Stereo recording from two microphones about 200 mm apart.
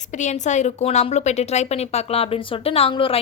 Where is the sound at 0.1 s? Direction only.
35° left (ahead or behind).